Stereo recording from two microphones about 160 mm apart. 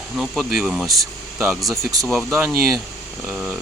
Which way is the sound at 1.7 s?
20° right (ahead or behind).